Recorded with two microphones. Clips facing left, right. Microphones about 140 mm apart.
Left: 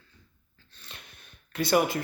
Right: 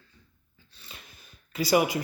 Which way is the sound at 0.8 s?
Centre (ahead or behind).